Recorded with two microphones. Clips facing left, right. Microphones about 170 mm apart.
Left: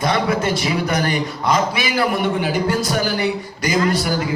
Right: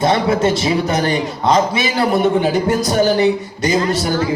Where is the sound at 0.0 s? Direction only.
25° right (ahead or behind).